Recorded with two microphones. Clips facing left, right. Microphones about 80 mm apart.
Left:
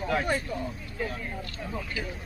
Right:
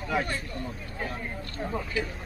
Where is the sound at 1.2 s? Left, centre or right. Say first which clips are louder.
Right 2 dB; right.